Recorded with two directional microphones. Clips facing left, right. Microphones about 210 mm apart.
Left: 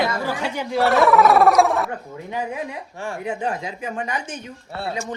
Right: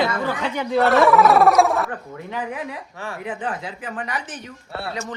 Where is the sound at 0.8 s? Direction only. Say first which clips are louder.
Even; centre (ahead or behind).